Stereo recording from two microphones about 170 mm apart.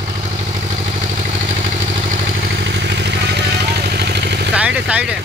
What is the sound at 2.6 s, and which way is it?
Vehicle, 90° right.